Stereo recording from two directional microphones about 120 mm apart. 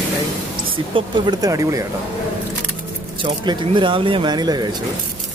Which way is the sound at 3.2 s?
40° right (ahead or behind).